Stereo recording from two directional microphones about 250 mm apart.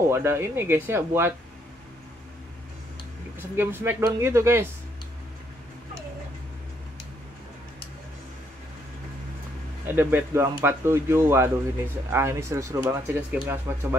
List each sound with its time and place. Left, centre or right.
0.1 s speech: centre
3.3 s speech: centre
9.9 s speech: centre